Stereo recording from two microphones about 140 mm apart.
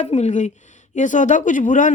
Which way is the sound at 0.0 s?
55° left (ahead or behind).